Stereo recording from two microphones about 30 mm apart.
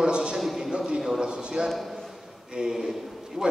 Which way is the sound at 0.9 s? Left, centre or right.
Centre.